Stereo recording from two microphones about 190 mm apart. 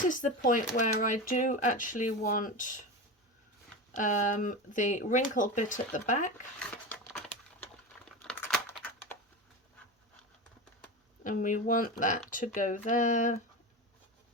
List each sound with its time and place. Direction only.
0.0 s speech: 45° left (ahead or behind)
3.9 s speech: 40° left (ahead or behind)
6.6 s a sound: 5° left (ahead or behind)
8.2 s crumpling: 5° left (ahead or behind)
11.2 s speech: 45° left (ahead or behind)